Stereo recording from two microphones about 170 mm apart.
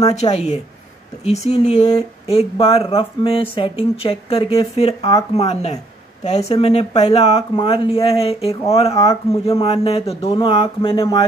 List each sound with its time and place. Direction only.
0.1 s speech: 40° left (ahead or behind)